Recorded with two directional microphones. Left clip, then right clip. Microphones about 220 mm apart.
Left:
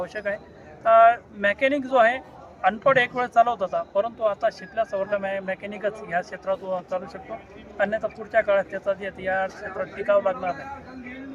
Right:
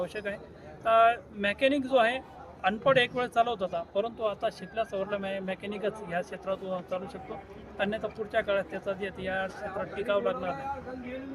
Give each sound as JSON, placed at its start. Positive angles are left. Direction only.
{"t": 0.0, "sound": "speech", "side_deg": -15}
{"t": 3.2, "sound": "speech", "side_deg": -5}